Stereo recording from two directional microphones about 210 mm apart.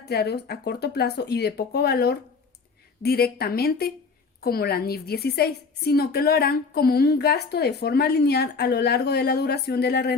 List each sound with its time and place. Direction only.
0.0 s a woman's voice: 50° left (ahead or behind)